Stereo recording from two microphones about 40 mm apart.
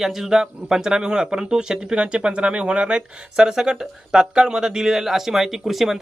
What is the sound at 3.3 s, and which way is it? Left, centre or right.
Speech, centre.